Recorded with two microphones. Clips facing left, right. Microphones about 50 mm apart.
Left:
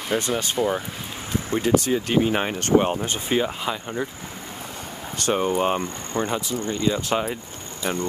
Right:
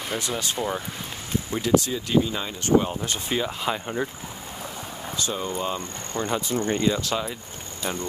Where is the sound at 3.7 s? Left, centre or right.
Centre.